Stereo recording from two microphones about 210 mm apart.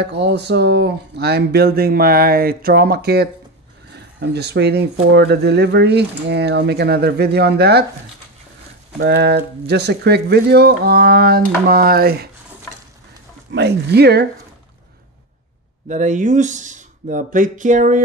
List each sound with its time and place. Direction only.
0.0 s speech: 50° right (ahead or behind)
9.0 s speech: 50° right (ahead or behind)
13.5 s speech: 50° right (ahead or behind)
15.9 s speech: 35° right (ahead or behind)